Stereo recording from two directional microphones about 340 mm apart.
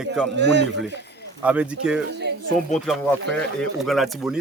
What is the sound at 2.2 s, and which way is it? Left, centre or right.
Speech, right.